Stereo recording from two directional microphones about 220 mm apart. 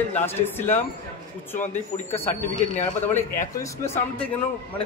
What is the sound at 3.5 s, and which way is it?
Speech, 15° left (ahead or behind).